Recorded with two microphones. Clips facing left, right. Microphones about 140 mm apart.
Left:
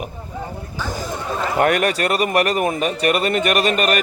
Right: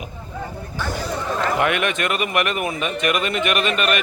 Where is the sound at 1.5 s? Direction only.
40° left (ahead or behind).